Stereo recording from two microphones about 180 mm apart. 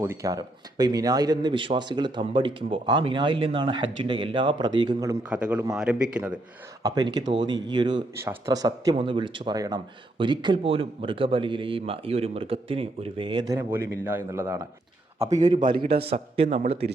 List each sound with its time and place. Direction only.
0.0 s speech: 20° right (ahead or behind)
5.3 s a man's voice: 5° right (ahead or behind)
6.8 s speech: 20° right (ahead or behind)
13.6 s speech: 10° right (ahead or behind)
15.2 s speech: 40° right (ahead or behind)